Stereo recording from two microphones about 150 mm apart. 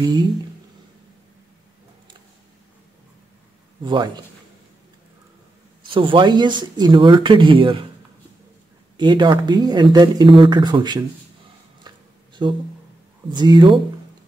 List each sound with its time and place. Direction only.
3.8 s speech: 30° right (ahead or behind)
5.9 s speech: 35° right (ahead or behind)
8.9 s speech: 30° right (ahead or behind)
11.9 s a sound: 30° right (ahead or behind)
12.4 s speech: 30° right (ahead or behind)